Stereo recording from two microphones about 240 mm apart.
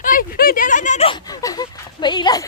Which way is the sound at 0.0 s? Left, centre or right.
Left.